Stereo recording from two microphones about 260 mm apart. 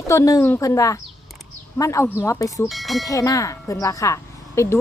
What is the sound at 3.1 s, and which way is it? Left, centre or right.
Speech, centre.